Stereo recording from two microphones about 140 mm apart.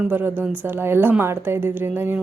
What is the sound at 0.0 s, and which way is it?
A woman's voice, 15° right (ahead or behind).